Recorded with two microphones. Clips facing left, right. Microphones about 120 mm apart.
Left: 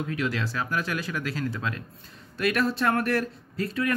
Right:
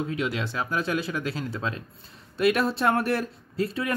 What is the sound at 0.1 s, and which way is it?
Speech, 20° right (ahead or behind).